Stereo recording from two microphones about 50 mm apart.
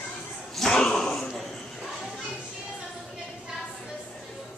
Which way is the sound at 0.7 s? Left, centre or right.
Centre.